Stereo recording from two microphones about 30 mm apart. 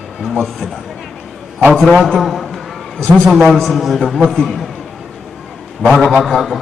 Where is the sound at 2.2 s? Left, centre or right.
Centre.